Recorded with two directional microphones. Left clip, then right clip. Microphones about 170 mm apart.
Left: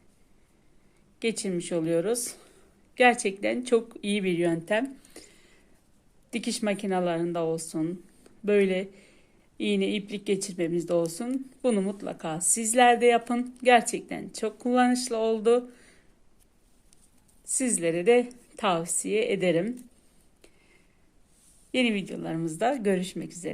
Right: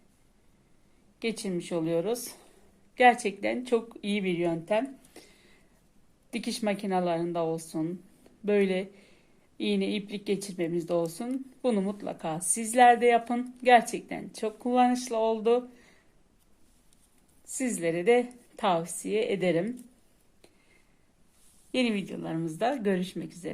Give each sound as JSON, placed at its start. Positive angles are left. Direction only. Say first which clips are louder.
{"t": 1.2, "sound": "speech", "louder": "left 3 dB", "side_deg": 20}
{"t": 17.6, "sound": "speech", "louder": "left 2 dB", "side_deg": 20}
{"t": 21.7, "sound": "speech", "louder": "left 2 dB", "side_deg": 20}